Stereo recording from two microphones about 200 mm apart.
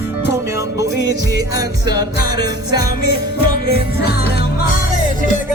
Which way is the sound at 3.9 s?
50° left (ahead or behind).